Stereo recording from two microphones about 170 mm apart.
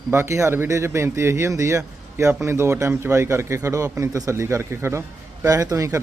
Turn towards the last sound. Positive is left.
turn(degrees=-20)  # may be behind; listen again after turning